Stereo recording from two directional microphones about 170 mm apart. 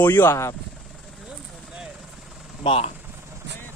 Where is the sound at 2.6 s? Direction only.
35° left (ahead or behind).